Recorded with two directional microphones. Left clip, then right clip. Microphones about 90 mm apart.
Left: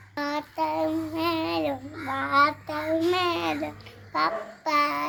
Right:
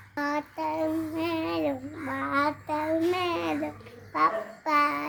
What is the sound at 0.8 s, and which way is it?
A child's voice, 15° right (ahead or behind).